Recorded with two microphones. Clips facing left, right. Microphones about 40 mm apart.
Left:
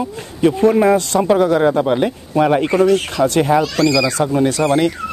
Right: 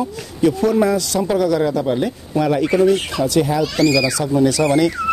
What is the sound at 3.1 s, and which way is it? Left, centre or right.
Speech, left.